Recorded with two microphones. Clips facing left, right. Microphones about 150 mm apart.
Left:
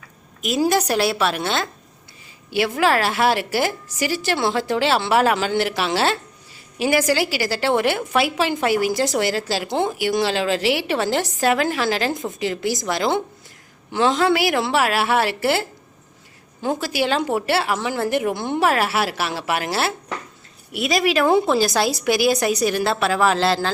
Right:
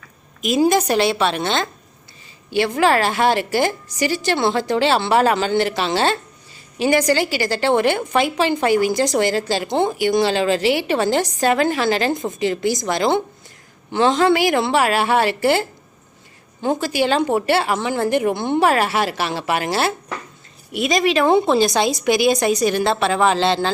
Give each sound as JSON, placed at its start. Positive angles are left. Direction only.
{"t": 0.4, "sound": "a woman's voice", "side_deg": 5}
{"t": 16.6, "sound": "a woman's voice", "side_deg": 5}
{"t": 21.2, "sound": "speech", "side_deg": -25}
{"t": 22.0, "sound": "a woman's voice", "side_deg": 5}